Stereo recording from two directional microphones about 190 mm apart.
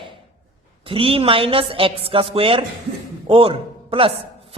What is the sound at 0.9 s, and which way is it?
A woman's voice, 30° right (ahead or behind).